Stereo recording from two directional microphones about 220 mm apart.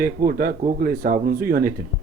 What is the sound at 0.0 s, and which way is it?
Speech, 40° right (ahead or behind).